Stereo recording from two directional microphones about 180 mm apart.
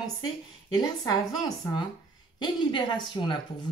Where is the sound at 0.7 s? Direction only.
20° left (ahead or behind).